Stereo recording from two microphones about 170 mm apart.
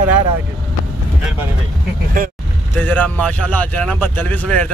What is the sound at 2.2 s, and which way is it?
Speech, 55° right (ahead or behind).